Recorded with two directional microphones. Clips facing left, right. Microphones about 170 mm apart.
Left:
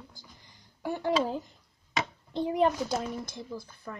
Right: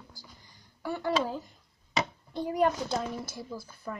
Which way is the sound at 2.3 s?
20° left (ahead or behind).